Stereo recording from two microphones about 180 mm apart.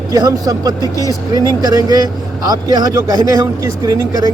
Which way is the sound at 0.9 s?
20° left (ahead or behind).